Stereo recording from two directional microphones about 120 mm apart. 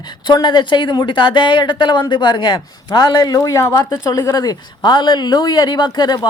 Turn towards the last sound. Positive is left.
turn(degrees=35)  # may be behind; listen again after turning